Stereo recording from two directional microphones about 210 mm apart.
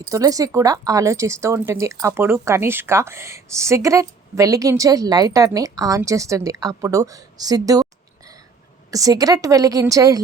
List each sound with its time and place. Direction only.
0.1 s speech: 15° right (ahead or behind)
8.9 s speech: 15° right (ahead or behind)